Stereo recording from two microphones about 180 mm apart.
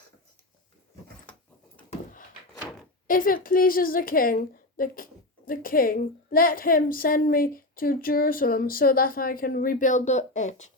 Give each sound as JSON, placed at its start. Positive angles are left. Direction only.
{"t": 3.1, "sound": "a woman's voice", "side_deg": 50}